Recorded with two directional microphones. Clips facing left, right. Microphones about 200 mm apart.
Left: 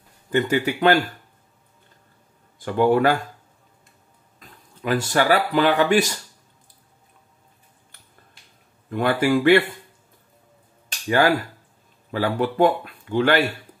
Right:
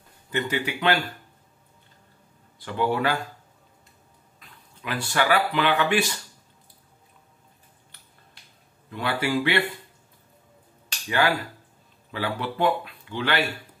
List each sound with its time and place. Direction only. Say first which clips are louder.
0.3 s speech: left 7 dB; 45° left (ahead or behind)
2.6 s speech: left 7 dB; 50° left (ahead or behind)
4.4 s speech: left 8 dB; 45° left (ahead or behind)
8.9 s speech: left 6 dB; 50° left (ahead or behind)
11.1 s speech: left 5 dB; 45° left (ahead or behind)